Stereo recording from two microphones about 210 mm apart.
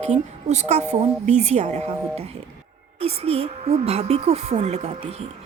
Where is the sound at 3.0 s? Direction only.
30° right (ahead or behind).